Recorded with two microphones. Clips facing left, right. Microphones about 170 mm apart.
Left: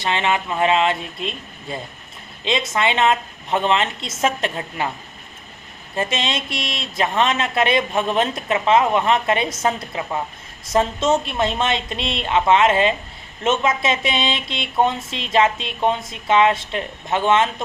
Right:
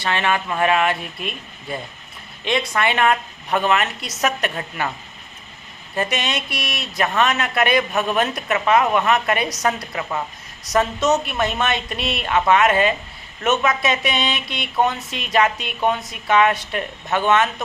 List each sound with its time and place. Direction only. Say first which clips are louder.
0.0 s speech: even; 20° left (ahead or behind)
6.0 s speech: even; 25° left (ahead or behind)